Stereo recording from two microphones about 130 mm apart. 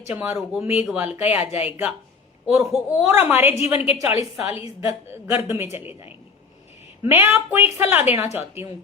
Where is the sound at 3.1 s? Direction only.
15° right (ahead or behind).